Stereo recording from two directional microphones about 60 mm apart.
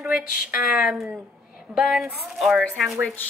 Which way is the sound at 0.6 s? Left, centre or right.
Centre.